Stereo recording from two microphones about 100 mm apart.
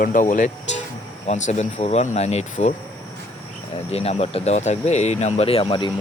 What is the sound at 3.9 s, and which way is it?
Speech, 90° left.